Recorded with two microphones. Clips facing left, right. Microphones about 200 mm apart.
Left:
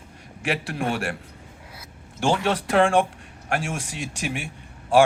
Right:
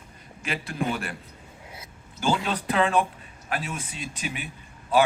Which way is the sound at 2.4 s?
80° left.